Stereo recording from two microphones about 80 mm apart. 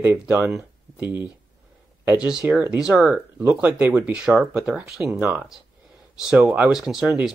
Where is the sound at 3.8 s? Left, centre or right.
Right.